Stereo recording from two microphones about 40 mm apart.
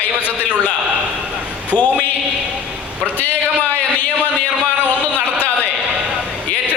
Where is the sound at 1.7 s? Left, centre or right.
Left.